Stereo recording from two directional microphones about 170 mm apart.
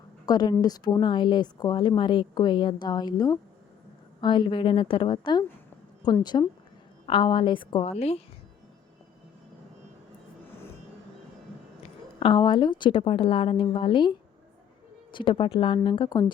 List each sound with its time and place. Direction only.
0.3 s speech: 25° left (ahead or behind)
12.2 s speech: 30° left (ahead or behind)